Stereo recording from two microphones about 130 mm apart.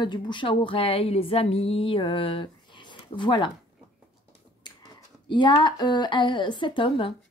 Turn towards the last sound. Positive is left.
turn(degrees=40)  # may be behind; listen again after turning